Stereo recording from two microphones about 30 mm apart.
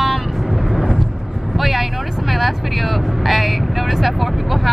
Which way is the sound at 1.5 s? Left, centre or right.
Centre.